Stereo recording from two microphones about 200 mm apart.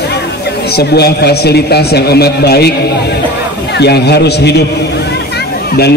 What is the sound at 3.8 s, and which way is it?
Speech, 55° left (ahead or behind).